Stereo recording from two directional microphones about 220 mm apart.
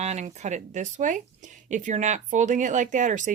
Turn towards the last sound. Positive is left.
turn(degrees=-35)  # may be behind; listen again after turning